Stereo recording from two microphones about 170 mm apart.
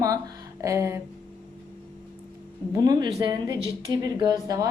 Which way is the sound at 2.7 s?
20° right (ahead or behind).